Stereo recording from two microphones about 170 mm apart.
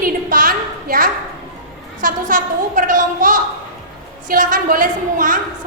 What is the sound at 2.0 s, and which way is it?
A woman's voice, 50° right (ahead or behind).